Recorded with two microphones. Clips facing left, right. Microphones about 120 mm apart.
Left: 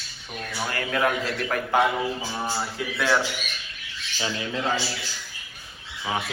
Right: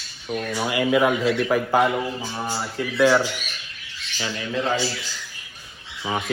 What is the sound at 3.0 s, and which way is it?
Speech, centre (ahead or behind).